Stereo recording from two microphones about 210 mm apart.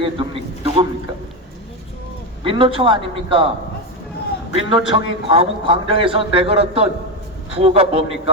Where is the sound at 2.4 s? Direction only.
25° right (ahead or behind).